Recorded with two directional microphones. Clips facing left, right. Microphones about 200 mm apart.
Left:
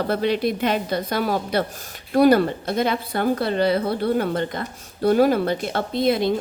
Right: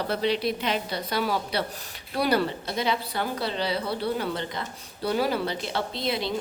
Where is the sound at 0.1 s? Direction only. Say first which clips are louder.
Left 3 dB; 50° left (ahead or behind).